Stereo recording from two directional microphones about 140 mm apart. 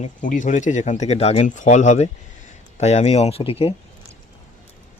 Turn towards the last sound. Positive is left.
turn(degrees=40)  # may be behind; listen again after turning